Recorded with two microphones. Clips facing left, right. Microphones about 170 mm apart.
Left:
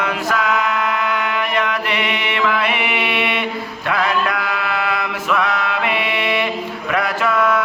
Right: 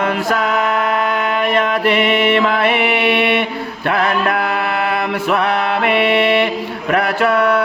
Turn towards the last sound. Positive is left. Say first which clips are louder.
# right 3 dB
turn(degrees=-60)  # may be behind; listen again after turning